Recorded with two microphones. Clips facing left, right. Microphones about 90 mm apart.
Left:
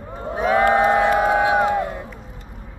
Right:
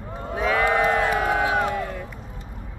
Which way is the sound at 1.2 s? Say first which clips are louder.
Left 5 dB; 20° left (ahead or behind).